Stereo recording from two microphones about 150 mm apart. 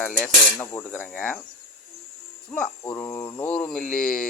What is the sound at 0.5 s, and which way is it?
Speech, 20° left (ahead or behind).